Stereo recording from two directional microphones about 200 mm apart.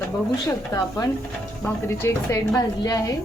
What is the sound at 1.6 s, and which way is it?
A woman's voice, 10° left (ahead or behind).